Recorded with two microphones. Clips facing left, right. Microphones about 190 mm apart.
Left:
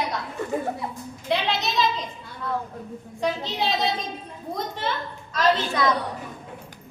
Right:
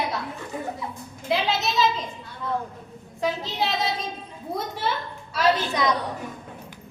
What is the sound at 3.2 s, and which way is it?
Speech, centre (ahead or behind).